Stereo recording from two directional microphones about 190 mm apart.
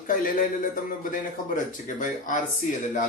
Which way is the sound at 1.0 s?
45° left (ahead or behind).